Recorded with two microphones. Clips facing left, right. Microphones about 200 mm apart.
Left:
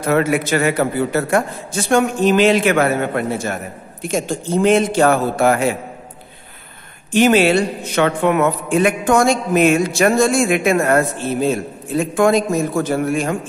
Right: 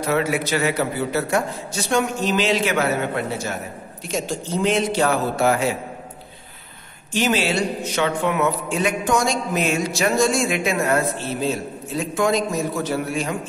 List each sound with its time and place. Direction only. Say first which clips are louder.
0.0 s a man's voice: left 5 dB; 50° left (ahead or behind)
7.1 s a man's voice: left 8 dB; 55° left (ahead or behind)